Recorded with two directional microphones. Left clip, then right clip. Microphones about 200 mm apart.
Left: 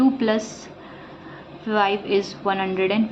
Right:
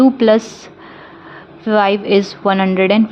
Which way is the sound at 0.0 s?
45° right (ahead or behind).